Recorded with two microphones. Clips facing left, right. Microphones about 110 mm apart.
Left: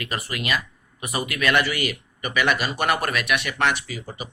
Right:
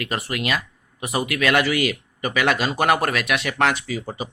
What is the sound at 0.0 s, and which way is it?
Speech, 70° right (ahead or behind).